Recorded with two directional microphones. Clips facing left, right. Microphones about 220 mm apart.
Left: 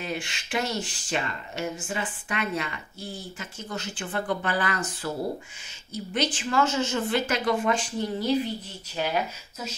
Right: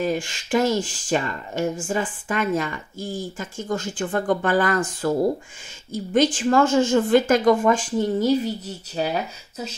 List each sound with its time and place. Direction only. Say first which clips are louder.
0.0 s speech: right 9 dB; 45° right (ahead or behind)
6.1 s speech: right 8 dB; 45° right (ahead or behind)